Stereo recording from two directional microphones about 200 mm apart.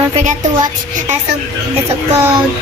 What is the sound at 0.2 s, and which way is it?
Speech, 35° right (ahead or behind).